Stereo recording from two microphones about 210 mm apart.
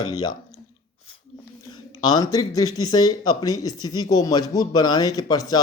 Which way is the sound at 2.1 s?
15° left (ahead or behind).